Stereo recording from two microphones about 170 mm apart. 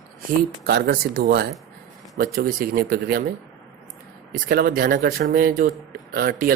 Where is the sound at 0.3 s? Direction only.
65° right (ahead or behind).